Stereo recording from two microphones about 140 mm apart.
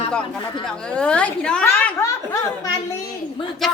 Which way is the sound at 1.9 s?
20° left (ahead or behind).